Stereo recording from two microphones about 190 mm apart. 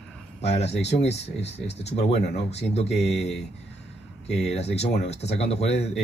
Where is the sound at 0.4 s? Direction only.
35° left (ahead or behind).